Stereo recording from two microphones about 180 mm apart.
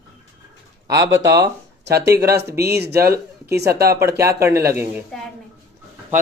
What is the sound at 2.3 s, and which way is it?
Speech, 65° right (ahead or behind).